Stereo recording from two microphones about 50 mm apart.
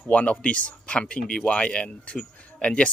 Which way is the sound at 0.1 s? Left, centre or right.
Left.